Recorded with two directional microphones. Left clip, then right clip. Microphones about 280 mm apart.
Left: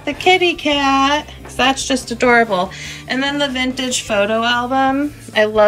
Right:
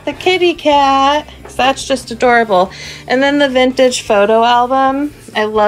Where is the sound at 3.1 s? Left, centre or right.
Centre.